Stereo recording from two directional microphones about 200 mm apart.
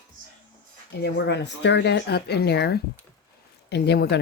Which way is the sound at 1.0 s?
60° left (ahead or behind).